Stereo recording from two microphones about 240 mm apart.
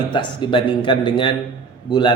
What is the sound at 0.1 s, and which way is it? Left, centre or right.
A man's voice, centre.